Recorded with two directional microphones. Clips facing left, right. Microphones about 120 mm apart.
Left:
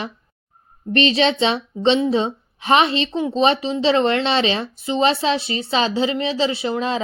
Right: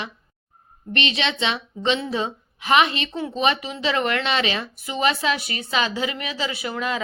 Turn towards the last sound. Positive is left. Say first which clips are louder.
# left 5 dB
turn(degrees=30)  # may be behind; listen again after turning